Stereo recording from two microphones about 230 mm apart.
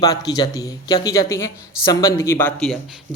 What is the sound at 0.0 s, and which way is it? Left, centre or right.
A man's voice, centre.